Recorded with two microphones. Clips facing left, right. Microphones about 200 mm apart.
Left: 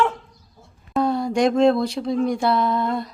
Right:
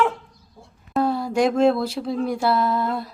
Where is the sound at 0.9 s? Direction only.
5° right (ahead or behind).